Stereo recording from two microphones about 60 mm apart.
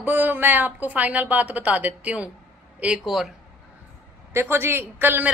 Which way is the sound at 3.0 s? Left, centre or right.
Centre.